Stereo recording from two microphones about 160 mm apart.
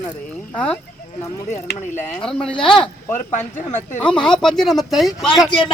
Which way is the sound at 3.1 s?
50° left (ahead or behind).